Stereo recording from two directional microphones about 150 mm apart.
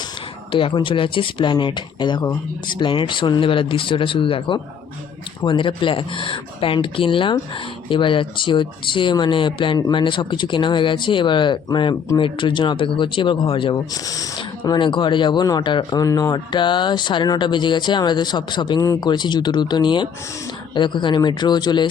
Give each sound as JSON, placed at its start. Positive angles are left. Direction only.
{"t": 0.5, "sound": "speech", "side_deg": 35}